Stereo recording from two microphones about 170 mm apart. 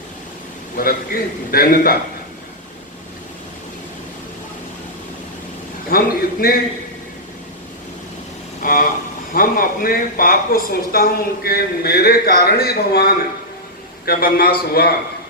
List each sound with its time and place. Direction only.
0.8 s a man's voice: 60° left (ahead or behind)
5.9 s a man's voice: 60° left (ahead or behind)
8.6 s a man's voice: 55° left (ahead or behind)